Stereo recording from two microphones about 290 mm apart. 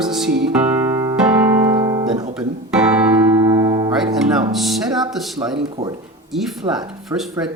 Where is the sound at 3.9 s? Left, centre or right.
Centre.